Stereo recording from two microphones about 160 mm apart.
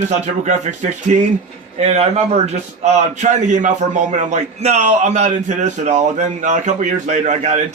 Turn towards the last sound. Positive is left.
turn(degrees=-45)  # may be behind; listen again after turning